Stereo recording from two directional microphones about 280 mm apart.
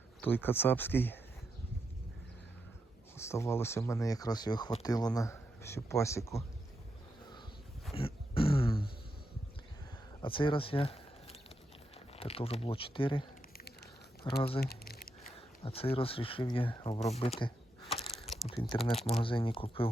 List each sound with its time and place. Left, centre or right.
0.2 s speech: centre
3.2 s speech: centre
7.9 s a sound: centre
10.2 s speech: centre
14.3 s speech: centre
14.6 s squish: left
15.4 s speech: left
18.0 s a sound: centre
18.9 s speech: left